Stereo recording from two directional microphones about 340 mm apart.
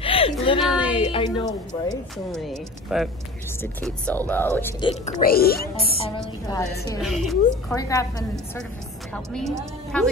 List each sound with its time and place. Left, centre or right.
0.0 s a sound: centre
0.9 s speech: centre
2.4 s a woman's voice: centre
5.2 s a woman's voice: left
7.0 s a woman's voice: centre